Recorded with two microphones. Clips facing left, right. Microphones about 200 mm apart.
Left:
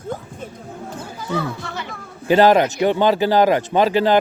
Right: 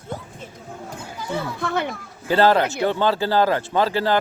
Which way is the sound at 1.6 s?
55° right (ahead or behind).